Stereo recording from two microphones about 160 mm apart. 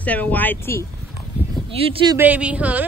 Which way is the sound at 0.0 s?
10° left (ahead or behind).